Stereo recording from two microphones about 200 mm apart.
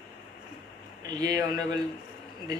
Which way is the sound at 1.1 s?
20° right (ahead or behind).